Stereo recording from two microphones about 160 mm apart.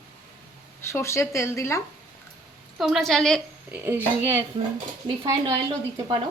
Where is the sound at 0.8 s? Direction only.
15° left (ahead or behind).